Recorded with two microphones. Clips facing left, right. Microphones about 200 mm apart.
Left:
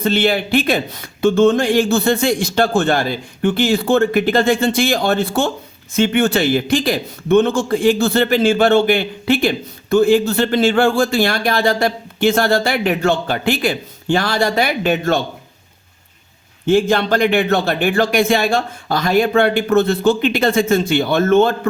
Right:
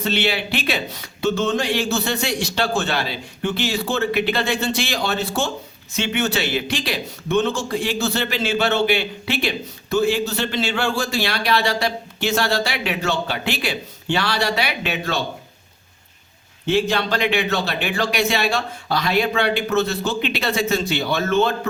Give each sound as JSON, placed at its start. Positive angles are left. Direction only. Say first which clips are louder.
{"t": 0.0, "sound": "a man's voice", "louder": "left 6 dB", "side_deg": 50}
{"t": 16.6, "sound": "a man's voice", "louder": "left 6 dB", "side_deg": 50}